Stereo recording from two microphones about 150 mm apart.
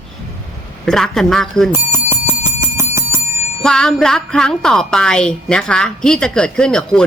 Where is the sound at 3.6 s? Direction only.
5° left (ahead or behind).